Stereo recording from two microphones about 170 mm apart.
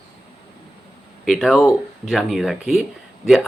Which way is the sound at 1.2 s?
Centre (ahead or behind).